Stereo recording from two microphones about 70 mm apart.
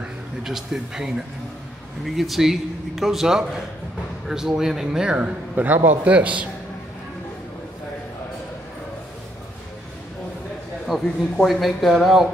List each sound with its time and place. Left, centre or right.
0.4 s a man's voice: centre
10.9 s a man's voice: centre